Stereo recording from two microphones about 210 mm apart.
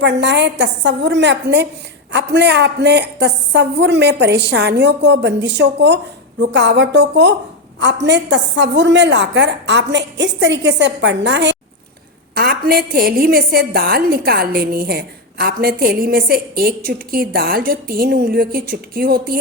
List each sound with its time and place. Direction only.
0.0 s a woman's voice: 55° right (ahead or behind)
12.3 s a woman's voice: 45° right (ahead or behind)